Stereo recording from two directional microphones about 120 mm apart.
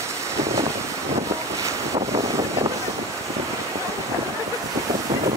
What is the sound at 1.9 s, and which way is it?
Wind noise, 65° right (ahead or behind).